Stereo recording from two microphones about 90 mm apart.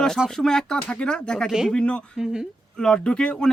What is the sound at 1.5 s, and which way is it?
Speech, 5° right (ahead or behind).